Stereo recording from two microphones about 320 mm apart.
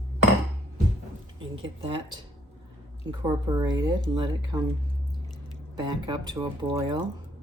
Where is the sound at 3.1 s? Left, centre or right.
Centre.